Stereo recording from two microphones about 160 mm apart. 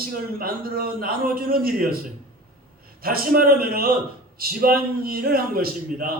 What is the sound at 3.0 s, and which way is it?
A man's voice, 70° right (ahead or behind).